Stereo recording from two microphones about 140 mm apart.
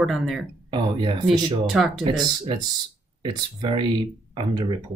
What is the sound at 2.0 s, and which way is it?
Speech, 35° right (ahead or behind).